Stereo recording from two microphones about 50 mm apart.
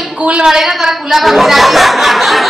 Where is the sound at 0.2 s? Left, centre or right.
Right.